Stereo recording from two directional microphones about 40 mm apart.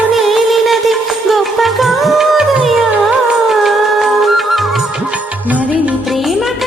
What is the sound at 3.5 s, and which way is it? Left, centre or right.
Music, centre.